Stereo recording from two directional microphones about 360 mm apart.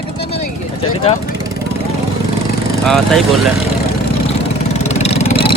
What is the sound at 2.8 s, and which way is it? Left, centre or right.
Speech, centre.